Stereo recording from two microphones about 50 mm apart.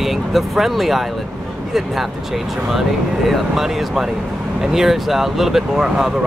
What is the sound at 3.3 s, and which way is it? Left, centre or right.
Speech, centre.